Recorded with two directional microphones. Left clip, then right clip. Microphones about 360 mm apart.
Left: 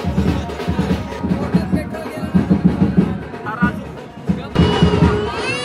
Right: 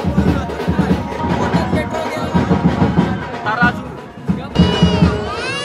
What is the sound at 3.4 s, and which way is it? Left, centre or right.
Music, centre.